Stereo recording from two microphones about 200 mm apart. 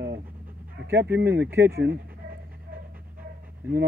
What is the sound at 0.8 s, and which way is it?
Speech, 55° right (ahead or behind).